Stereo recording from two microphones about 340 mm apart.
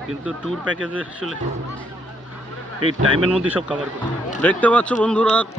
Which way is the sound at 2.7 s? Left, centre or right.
Right.